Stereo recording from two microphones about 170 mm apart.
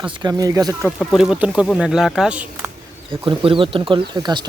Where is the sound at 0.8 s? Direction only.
Centre (ahead or behind).